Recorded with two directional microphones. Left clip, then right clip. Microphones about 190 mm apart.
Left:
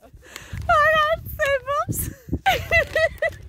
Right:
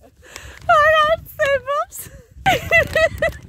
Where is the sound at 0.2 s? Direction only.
5° right (ahead or behind).